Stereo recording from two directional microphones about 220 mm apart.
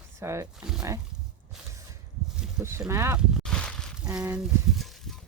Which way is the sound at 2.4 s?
10° right (ahead or behind).